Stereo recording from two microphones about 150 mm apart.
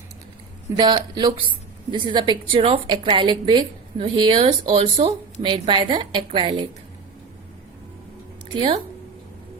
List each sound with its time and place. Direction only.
0.8 s a woman's voice: 30° right (ahead or behind)